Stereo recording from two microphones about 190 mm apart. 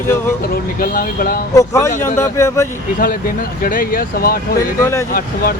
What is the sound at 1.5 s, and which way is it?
Speech, 15° left (ahead or behind).